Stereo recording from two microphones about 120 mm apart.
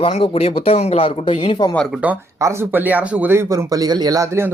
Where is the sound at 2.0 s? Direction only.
10° right (ahead or behind).